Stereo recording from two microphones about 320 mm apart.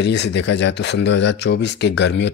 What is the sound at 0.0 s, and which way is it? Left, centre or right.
Speech, left.